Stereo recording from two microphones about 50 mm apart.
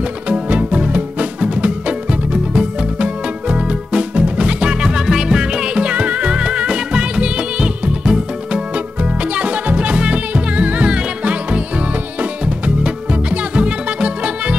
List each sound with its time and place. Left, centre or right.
0.3 s music: right